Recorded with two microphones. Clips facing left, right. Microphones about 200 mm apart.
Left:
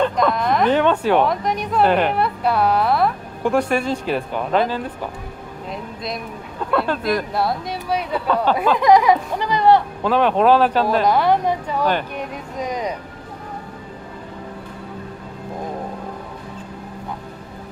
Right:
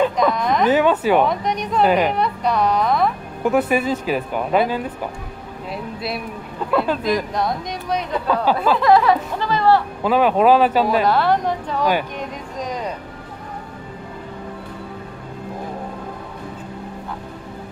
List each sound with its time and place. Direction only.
0.0 s speech: centre (ahead or behind)
5.7 s a sound: 5° right (ahead or behind)
6.7 s speech: centre (ahead or behind); by 9.8 s 15° left (ahead or behind)
10.0 s speech: 5° right (ahead or behind)
11.1 s speech: 15° left (ahead or behind)